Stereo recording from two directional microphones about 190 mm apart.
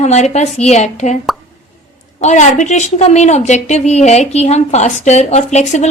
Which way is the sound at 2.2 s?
40° left (ahead or behind).